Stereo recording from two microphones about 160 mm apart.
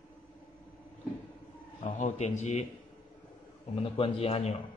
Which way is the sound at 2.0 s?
50° left (ahead or behind).